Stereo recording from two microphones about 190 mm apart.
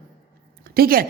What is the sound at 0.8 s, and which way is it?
Speech, 50° right (ahead or behind).